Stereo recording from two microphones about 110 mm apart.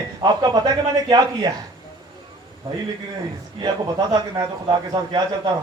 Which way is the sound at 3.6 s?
35° right (ahead or behind).